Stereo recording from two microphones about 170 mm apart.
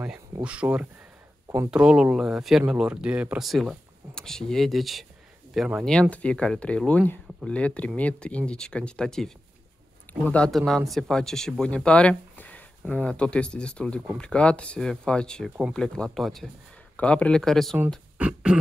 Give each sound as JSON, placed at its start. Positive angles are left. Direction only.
{"t": 0.0, "sound": "speech", "side_deg": -5}
{"t": 5.9, "sound": "speech", "side_deg": 5}